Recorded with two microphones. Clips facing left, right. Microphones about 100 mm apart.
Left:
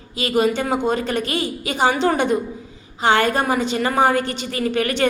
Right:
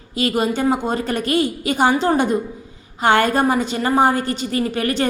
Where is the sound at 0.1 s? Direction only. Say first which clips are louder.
Left 1 dB; 45° right (ahead or behind).